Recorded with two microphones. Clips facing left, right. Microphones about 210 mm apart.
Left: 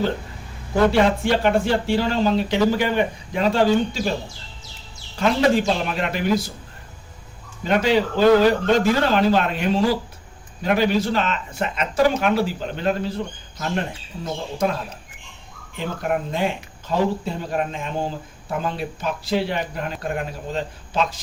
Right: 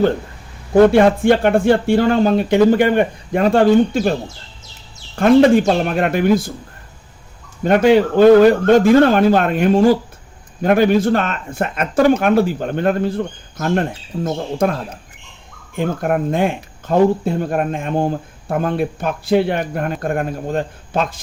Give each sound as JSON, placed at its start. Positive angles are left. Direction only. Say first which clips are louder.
{"t": 0.9, "sound": "speech", "louder": "right 6 dB", "side_deg": -55}
{"t": 5.1, "sound": "speech", "louder": "right 8 dB", "side_deg": -50}
{"t": 7.6, "sound": "speech", "louder": "right 7 dB", "side_deg": -50}